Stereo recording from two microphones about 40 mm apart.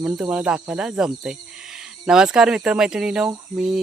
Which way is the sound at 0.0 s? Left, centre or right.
Right.